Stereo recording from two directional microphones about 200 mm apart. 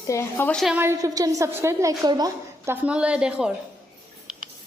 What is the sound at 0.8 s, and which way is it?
A woman's voice, 15° right (ahead or behind).